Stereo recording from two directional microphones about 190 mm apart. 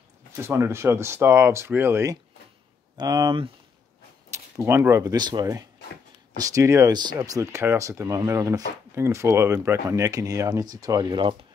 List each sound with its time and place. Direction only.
0.5 s speech: 15° right (ahead or behind)
4.3 s speech: 15° right (ahead or behind)